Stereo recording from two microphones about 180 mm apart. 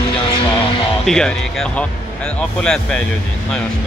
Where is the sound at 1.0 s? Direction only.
5° left (ahead or behind).